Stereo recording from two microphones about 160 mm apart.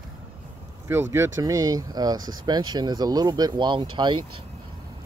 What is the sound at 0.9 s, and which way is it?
Speech, 15° right (ahead or behind).